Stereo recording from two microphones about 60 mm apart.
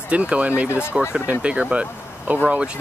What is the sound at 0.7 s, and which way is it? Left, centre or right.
Speech, left.